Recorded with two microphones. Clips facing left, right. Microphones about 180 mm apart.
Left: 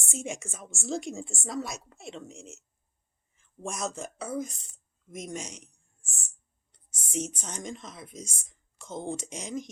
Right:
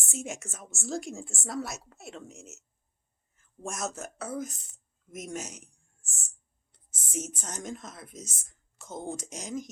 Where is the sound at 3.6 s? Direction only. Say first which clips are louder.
Left 1 dB; centre (ahead or behind).